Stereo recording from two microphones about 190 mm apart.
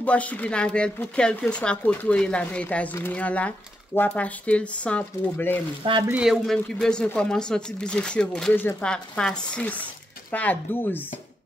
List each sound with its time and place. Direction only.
0.0 s speech: 5° left (ahead or behind)
6.0 s speech: 5° right (ahead or behind)